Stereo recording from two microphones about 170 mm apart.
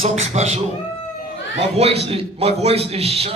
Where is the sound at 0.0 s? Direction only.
40° right (ahead or behind).